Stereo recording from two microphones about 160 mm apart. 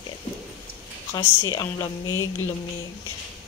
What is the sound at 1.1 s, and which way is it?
Speech, 25° left (ahead or behind).